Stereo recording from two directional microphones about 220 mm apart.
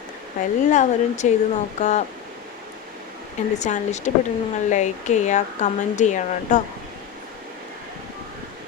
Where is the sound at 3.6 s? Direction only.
30° left (ahead or behind).